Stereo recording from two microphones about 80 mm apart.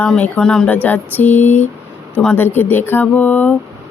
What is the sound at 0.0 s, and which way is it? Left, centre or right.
Speech, centre.